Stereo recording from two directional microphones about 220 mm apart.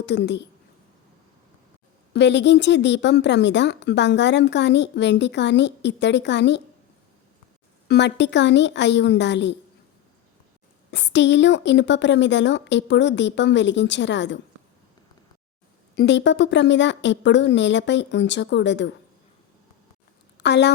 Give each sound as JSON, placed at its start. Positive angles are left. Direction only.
{"t": 0.0, "sound": "a woman's voice", "side_deg": 50}
{"t": 2.1, "sound": "a woman's voice", "side_deg": 55}
{"t": 7.9, "sound": "a woman's voice", "side_deg": 50}
{"t": 10.9, "sound": "a woman's voice", "side_deg": 50}
{"t": 16.0, "sound": "speech", "side_deg": 55}
{"t": 20.4, "sound": "speech", "side_deg": 50}